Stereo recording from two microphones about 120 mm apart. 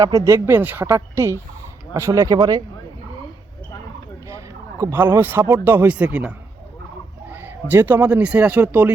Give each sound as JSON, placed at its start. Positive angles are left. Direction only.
{"t": 0.0, "sound": "speech", "side_deg": -25}
{"t": 4.8, "sound": "speech", "side_deg": -20}